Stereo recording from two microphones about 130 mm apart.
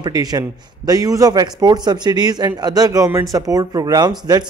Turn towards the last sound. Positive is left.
turn(degrees=-30)  # may be behind; listen again after turning